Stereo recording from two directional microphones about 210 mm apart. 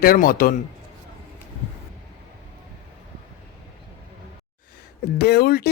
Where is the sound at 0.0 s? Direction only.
45° left (ahead or behind).